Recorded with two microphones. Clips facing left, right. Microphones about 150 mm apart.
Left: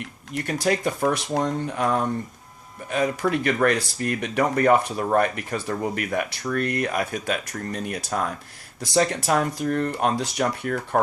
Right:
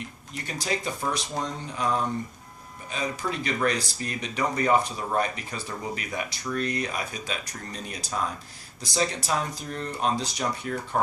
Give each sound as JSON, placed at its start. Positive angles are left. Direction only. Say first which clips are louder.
{"t": 0.3, "sound": "speech", "louder": "left 7 dB", "side_deg": 55}